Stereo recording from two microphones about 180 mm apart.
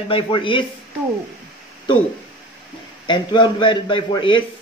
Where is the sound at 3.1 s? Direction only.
25° left (ahead or behind).